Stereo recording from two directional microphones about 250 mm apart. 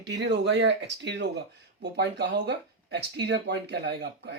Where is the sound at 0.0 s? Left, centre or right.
Right.